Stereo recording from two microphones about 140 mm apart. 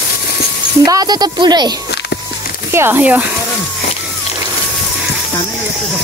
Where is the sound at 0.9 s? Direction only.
25° right (ahead or behind).